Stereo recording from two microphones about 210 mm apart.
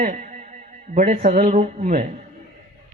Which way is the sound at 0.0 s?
40° right (ahead or behind).